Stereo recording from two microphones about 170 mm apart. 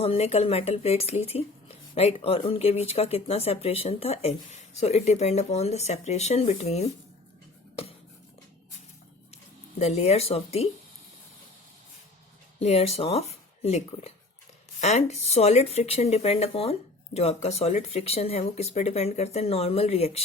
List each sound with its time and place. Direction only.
0.0 s speech: 35° left (ahead or behind)
9.7 s speech: 40° left (ahead or behind)
12.5 s speech: 35° left (ahead or behind)